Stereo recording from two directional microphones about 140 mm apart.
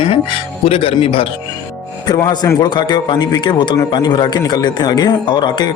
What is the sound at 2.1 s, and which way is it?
Speech, 25° left (ahead or behind).